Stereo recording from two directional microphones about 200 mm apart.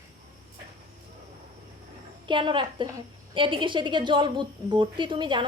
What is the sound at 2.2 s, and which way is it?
A woman's voice, 25° right (ahead or behind).